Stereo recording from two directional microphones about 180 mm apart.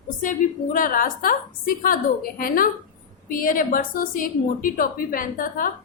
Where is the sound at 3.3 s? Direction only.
50° left (ahead or behind).